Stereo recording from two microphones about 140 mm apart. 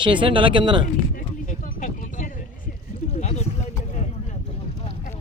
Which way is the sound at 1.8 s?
65° left (ahead or behind).